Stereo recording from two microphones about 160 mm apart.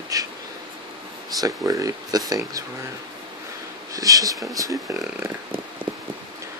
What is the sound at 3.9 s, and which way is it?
Speech, 20° right (ahead or behind).